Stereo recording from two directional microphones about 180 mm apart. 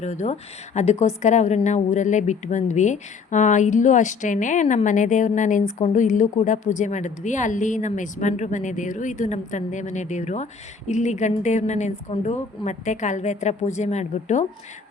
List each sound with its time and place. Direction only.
0.0 s a woman's voice: 40° left (ahead or behind)